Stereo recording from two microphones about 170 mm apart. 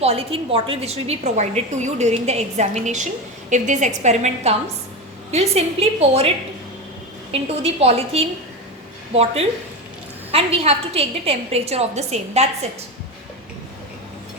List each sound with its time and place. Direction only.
0.0 s a woman's voice: 35° right (ahead or behind)